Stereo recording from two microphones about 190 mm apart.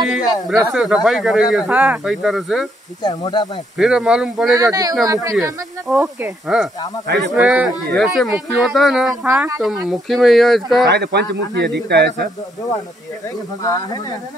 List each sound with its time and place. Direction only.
0.5 s speech: centre (ahead or behind)
3.0 s speech: 20° left (ahead or behind)
3.7 s speech: centre (ahead or behind)
4.5 s speech: 20° right (ahead or behind)
5.9 s speech: 5° right (ahead or behind)
10.9 s a man's voice: 60° right (ahead or behind)